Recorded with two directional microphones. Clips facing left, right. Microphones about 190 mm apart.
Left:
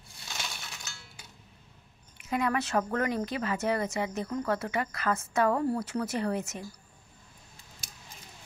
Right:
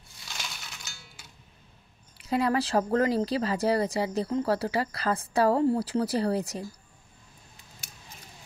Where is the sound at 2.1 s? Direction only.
35° right (ahead or behind).